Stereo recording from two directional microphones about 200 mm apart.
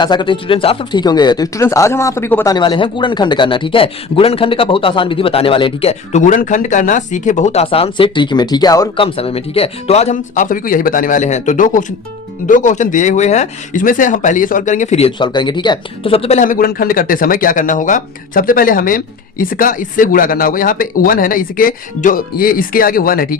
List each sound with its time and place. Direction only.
0.0 s speech: 20° left (ahead or behind)
9.1 s speech: 30° left (ahead or behind); by 23.4 s 45° left (ahead or behind)